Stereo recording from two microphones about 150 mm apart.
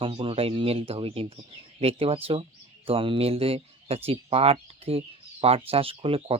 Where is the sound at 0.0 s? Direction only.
35° right (ahead or behind).